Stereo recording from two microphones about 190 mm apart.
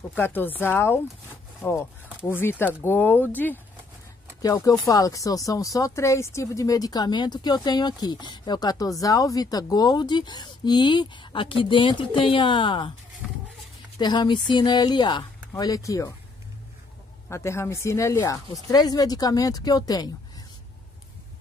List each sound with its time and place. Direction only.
0.1 s speech: 10° left (ahead or behind)
13.9 s speech: 20° left (ahead or behind)
17.3 s speech: 15° left (ahead or behind)